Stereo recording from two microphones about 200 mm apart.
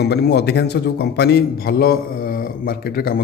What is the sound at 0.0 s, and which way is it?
A man's voice, 55° left (ahead or behind).